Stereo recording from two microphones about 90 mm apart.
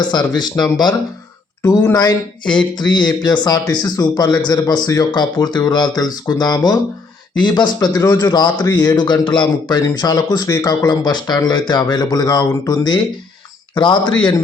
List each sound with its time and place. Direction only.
0.1 s speech: 55° left (ahead or behind)
1.6 s speech: 40° left (ahead or behind)
2.5 s a man's voice: 55° left (ahead or behind)